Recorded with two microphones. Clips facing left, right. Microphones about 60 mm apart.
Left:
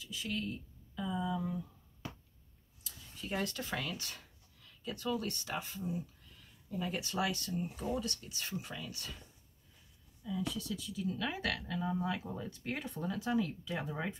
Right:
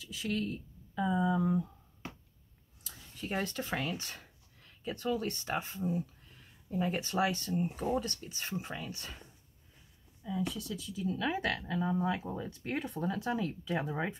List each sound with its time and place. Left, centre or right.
0.0 s speech: right
0.9 s speech: right
3.3 s speech: right